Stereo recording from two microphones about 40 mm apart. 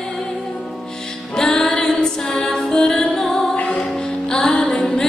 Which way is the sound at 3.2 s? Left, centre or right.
Centre.